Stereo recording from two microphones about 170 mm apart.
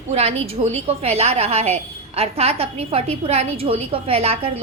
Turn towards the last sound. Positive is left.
turn(degrees=-35)  # may be behind; listen again after turning